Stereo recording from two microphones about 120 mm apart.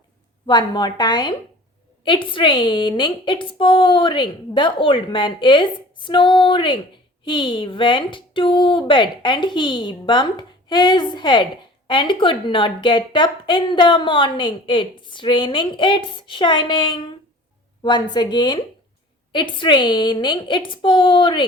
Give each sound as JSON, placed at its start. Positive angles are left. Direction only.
{"t": 0.4, "sound": "a woman's voice", "side_deg": 35}